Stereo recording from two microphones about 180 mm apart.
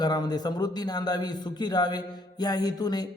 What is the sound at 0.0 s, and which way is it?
A man's voice, 20° left (ahead or behind).